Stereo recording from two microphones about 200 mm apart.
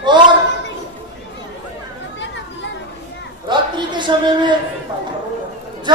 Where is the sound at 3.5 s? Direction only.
25° right (ahead or behind).